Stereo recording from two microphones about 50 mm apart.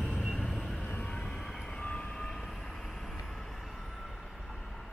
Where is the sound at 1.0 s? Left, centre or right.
Centre.